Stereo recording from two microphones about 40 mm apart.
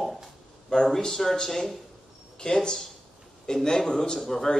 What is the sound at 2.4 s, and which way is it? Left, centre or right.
A man's voice, left.